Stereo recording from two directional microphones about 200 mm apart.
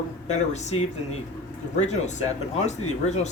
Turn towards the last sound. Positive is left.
turn(degrees=35)  # may be behind; listen again after turning